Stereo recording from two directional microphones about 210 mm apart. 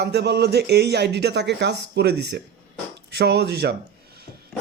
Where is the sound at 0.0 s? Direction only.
50° right (ahead or behind).